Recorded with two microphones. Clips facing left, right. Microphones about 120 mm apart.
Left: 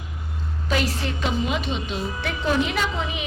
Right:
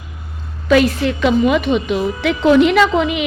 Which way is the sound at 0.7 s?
80° right.